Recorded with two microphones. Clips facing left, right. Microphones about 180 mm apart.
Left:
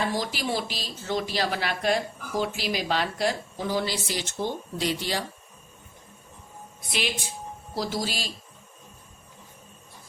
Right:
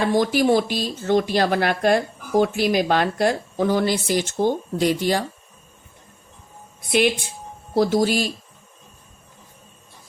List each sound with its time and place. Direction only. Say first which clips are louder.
0.1 s speech: right 11 dB; 55° right (ahead or behind)
7.8 s speech: right 12 dB; 55° right (ahead or behind)